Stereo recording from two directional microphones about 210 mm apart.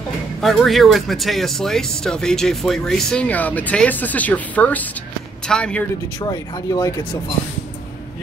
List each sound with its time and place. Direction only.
0.4 s speech: centre (ahead or behind)
6.1 s speech: 20° left (ahead or behind)